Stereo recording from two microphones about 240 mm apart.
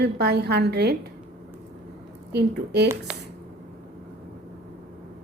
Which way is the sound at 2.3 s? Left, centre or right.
Right.